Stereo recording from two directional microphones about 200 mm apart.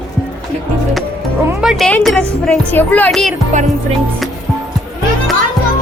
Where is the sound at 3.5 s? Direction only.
35° right (ahead or behind).